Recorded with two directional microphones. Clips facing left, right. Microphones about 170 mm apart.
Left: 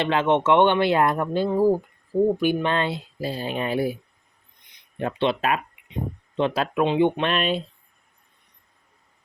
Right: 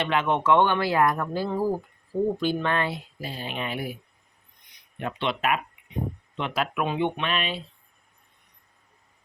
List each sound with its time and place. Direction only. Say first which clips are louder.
0.0 s speech: left 4 dB; 30° left (ahead or behind)
4.9 s speech: left 5 dB; 30° left (ahead or behind)
7.2 s speech: left 6 dB; 45° left (ahead or behind)